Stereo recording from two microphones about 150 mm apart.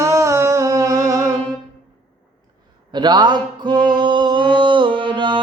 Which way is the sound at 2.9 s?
30° right (ahead or behind).